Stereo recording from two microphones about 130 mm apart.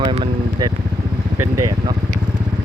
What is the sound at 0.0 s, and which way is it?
Vehicle, 45° right (ahead or behind).